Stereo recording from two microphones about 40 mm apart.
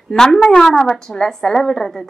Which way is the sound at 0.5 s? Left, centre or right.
Centre.